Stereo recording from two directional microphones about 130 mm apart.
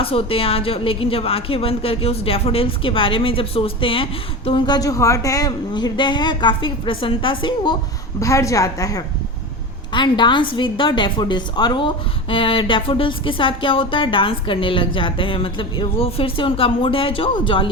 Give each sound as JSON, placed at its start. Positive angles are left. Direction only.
{"t": 0.0, "sound": "a woman's voice", "side_deg": 45}
{"t": 8.2, "sound": "a woman's voice", "side_deg": 25}
{"t": 9.9, "sound": "a woman's voice", "side_deg": 40}